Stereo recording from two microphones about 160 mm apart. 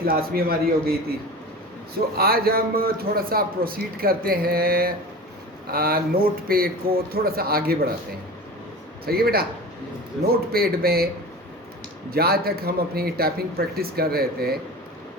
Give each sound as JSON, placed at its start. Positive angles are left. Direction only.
{"t": 0.0, "sound": "a man's voice", "side_deg": -70}
{"t": 2.1, "sound": "a man's voice", "side_deg": -70}
{"t": 9.0, "sound": "a man's voice", "side_deg": -75}
{"t": 12.1, "sound": "a man's voice", "side_deg": -75}